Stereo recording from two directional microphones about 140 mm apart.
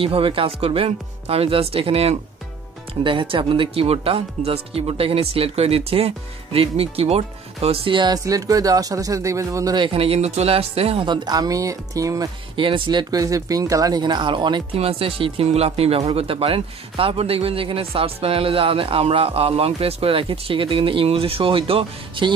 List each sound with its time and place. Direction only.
0.0 s speech: 40° right (ahead or behind); by 9.8 s 25° right (ahead or behind)
9.8 s speech: 45° right (ahead or behind); by 12.3 s 25° right (ahead or behind)
12.5 s speech: 35° right (ahead or behind)